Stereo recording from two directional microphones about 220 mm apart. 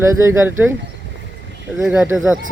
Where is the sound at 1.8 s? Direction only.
5° right (ahead or behind).